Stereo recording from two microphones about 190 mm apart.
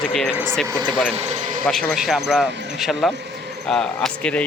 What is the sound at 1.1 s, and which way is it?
Speech, 35° right (ahead or behind).